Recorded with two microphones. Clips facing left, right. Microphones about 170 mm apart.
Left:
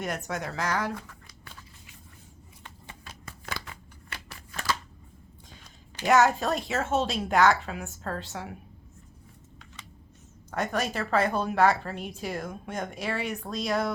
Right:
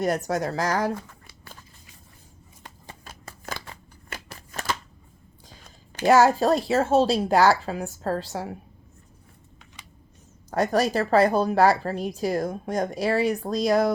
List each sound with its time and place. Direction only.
0.0 s speech: 35° right (ahead or behind)
1.0 s a sound: 35° right (ahead or behind)
2.6 s shuffling cards: 40° right (ahead or behind)
5.6 s speech: 45° right (ahead or behind)
9.8 s a sound: 15° right (ahead or behind)
10.5 s speech: 35° right (ahead or behind)